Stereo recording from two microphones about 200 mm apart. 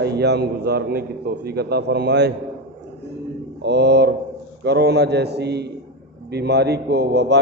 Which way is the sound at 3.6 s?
55° right (ahead or behind).